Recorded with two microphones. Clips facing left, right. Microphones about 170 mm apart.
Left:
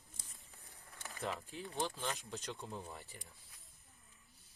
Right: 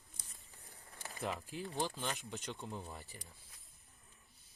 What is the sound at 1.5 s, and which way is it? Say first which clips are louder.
Speech: right 2 dB; 15° right (ahead or behind).